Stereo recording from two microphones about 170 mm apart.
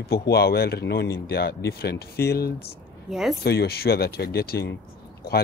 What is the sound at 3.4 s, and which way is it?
Speech, 70° left (ahead or behind).